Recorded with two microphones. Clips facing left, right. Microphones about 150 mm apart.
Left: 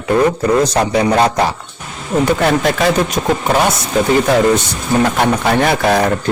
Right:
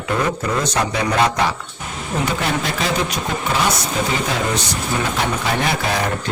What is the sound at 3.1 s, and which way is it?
Speech, 55° left (ahead or behind).